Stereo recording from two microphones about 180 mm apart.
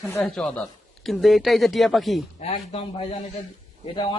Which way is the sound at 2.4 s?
35° left (ahead or behind).